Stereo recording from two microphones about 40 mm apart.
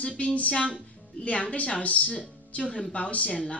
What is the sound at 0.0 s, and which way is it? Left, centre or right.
Speech, left.